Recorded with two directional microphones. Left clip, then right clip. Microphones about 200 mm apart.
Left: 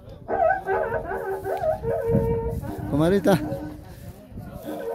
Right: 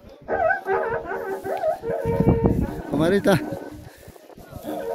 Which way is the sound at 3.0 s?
5° left (ahead or behind).